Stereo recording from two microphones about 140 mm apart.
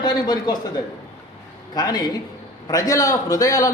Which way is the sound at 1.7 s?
30° left (ahead or behind).